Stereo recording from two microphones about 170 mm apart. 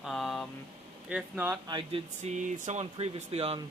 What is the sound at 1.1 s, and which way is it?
Speech, 10° right (ahead or behind).